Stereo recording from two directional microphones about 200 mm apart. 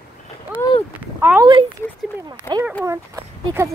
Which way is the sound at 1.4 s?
25° right (ahead or behind).